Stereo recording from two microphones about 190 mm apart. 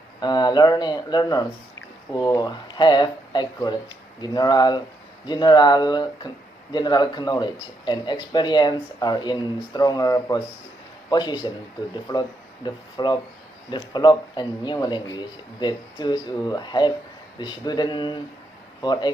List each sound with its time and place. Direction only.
0.2 s speech: 20° left (ahead or behind)